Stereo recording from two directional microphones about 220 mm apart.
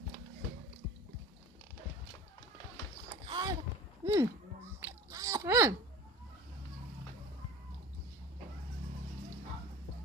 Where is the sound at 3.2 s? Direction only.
20° right (ahead or behind).